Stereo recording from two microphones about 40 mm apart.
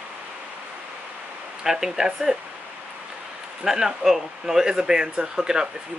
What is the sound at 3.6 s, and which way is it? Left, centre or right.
Speech, centre.